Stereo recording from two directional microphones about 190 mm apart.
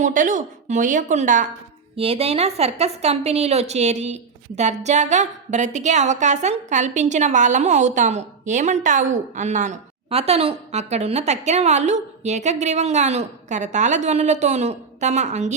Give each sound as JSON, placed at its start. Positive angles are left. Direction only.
{"t": 0.0, "sound": "a woman's voice", "side_deg": -45}